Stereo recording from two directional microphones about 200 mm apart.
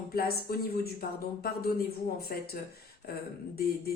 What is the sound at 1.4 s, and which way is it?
A woman's voice, 50° left (ahead or behind).